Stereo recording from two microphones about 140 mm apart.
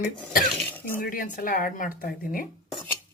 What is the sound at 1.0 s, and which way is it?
Speech, 80° left.